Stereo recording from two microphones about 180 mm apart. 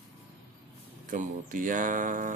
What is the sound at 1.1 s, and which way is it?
Speech, 45° right (ahead or behind).